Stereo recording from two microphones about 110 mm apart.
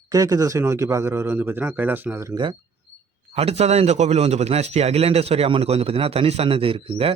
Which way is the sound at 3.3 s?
70° right (ahead or behind).